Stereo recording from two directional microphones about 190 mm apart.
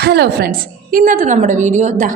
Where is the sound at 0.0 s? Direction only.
60° right (ahead or behind).